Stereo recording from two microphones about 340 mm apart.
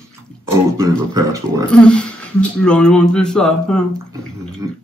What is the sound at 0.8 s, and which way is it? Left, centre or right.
Speech, centre.